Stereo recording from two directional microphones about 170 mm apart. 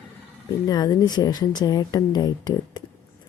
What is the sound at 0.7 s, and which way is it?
Speech, 25° left (ahead or behind).